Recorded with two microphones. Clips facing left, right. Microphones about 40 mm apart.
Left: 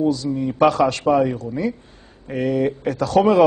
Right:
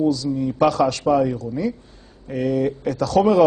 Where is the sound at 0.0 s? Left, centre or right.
Left.